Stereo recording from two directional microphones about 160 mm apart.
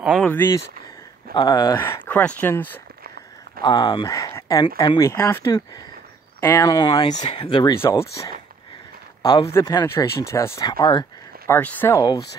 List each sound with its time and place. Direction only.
0.0 s speech: centre (ahead or behind)
0.3 s speech: 15° left (ahead or behind)
1.3 s speech: 25° left (ahead or behind)
3.6 s speech: 25° left (ahead or behind)
7.8 s speech: 15° left (ahead or behind)
9.2 s speech: 25° left (ahead or behind)
11.4 s speech: 15° left (ahead or behind)